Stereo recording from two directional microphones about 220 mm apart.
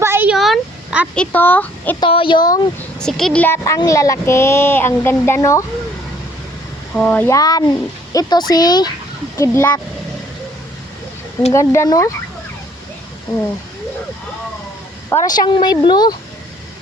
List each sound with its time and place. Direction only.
0.0 s a sound: 10° right (ahead or behind); by 2.0 s 10° left (ahead or behind)
2.0 s speech: 25° left (ahead or behind)
3.0 s a woman's voice: centre (ahead or behind)
6.9 s a woman's voice: 5° left (ahead or behind)
11.5 s a woman's voice: 15° left (ahead or behind)
15.1 s speech: 20° left (ahead or behind)